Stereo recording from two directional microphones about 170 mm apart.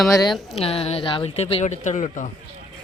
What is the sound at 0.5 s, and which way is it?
Speech, 35° left (ahead or behind).